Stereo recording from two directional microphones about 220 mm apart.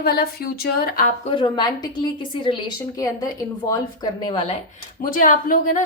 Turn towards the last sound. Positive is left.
turn(degrees=40)  # may be behind; listen again after turning